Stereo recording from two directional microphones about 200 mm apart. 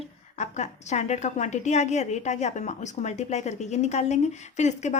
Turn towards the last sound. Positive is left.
turn(degrees=35)  # may be behind; listen again after turning